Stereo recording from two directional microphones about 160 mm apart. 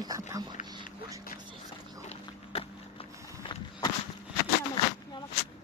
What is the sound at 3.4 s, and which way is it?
Walk, 30° left (ahead or behind).